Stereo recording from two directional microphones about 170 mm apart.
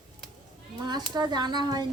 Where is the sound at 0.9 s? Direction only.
25° right (ahead or behind).